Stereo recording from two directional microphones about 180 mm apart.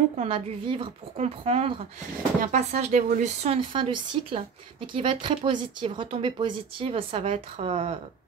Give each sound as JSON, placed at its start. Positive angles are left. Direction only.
{"t": 0.2, "sound": "a woman's voice", "side_deg": -30}